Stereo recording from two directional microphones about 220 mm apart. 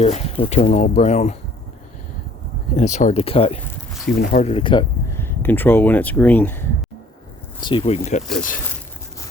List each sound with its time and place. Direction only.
0.0 s speech: 30° left (ahead or behind)
2.7 s speech: 35° left (ahead or behind)
5.2 s speech: 10° left (ahead or behind)
7.6 s speech: 20° left (ahead or behind)